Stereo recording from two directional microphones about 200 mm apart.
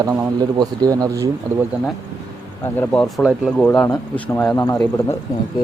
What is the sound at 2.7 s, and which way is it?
Speech, 5° left (ahead or behind).